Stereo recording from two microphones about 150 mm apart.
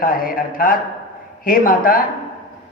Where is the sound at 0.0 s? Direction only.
70° left (ahead or behind).